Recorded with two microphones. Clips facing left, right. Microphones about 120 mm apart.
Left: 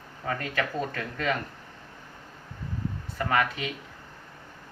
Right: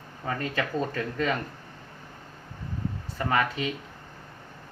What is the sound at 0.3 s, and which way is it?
Speech, 30° right (ahead or behind).